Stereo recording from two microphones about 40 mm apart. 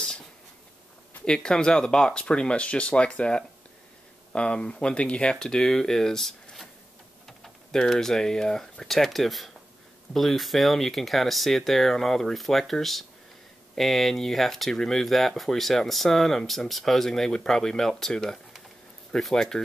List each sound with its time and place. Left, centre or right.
1.2 s speech: centre
7.2 s typing: centre
7.9 s speech: centre
13.7 s speech: centre